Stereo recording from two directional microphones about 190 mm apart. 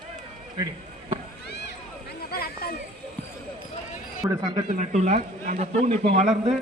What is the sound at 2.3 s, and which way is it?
Speech, 55° left (ahead or behind).